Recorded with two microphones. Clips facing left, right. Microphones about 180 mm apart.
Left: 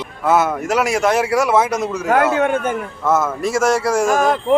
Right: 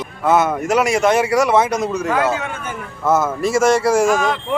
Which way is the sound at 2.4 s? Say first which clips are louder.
Left 10 dB; 55° left (ahead or behind).